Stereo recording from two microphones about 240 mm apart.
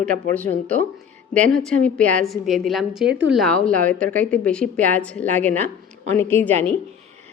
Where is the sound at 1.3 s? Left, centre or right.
Right.